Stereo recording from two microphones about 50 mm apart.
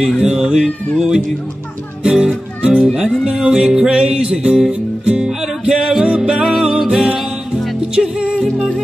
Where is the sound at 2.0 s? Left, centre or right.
Centre.